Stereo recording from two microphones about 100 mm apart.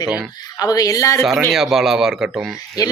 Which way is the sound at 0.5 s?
40° left (ahead or behind).